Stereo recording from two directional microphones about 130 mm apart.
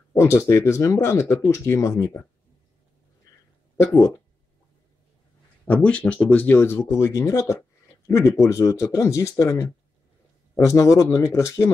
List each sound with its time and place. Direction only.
0.1 s speech: 20° left (ahead or behind)
3.3 s a sound: 25° left (ahead or behind)
3.8 s speech: 20° left (ahead or behind)
5.7 s speech: 10° left (ahead or behind)